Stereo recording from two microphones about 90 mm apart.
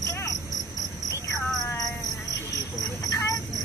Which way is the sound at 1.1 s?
35° left (ahead or behind).